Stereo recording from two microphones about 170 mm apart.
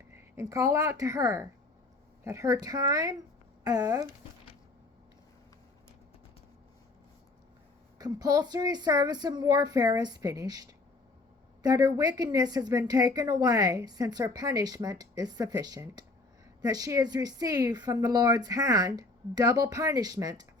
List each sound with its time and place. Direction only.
0.3 s speech: 20° right (ahead or behind)
7.9 s speech: 20° right (ahead or behind)